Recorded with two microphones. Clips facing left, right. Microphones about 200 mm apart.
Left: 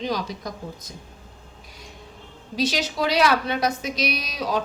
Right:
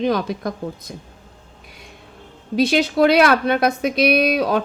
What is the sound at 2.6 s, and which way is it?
A woman's voice, 55° right (ahead or behind).